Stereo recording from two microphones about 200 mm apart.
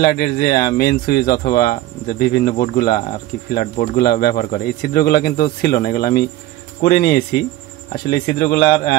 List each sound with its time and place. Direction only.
0.0 s speech: 50° left (ahead or behind)